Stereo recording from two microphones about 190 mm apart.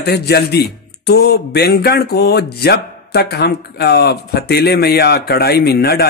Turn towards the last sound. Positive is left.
turn(degrees=55)  # may be behind; listen again after turning